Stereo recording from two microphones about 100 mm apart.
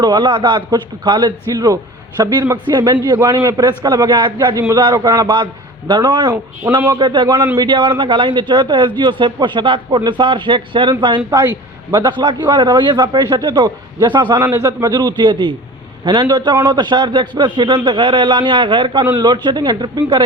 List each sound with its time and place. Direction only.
0.0 s a man's voice: 45° right (ahead or behind)
0.7 s a man's voice: 45° right (ahead or behind)
11.9 s a man's voice: 45° right (ahead or behind)
14.3 s a man's voice: 20° right (ahead or behind)
14.6 s a man's voice: 40° right (ahead or behind); by 16.2 s 55° right (ahead or behind)
16.6 s a man's voice: 45° right (ahead or behind)